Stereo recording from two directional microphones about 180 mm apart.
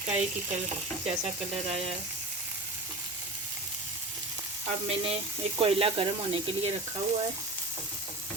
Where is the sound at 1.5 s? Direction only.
35° right (ahead or behind).